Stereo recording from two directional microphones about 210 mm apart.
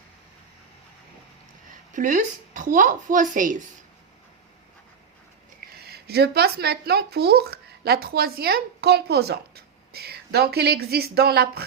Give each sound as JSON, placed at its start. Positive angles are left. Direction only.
{"t": 1.7, "sound": "a woman's voice", "side_deg": -40}
{"t": 5.5, "sound": "speech", "side_deg": -50}